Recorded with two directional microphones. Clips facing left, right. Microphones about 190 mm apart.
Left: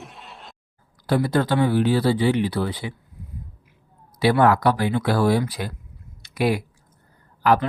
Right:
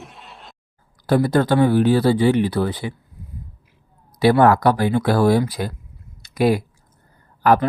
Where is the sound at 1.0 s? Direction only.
45° right (ahead or behind).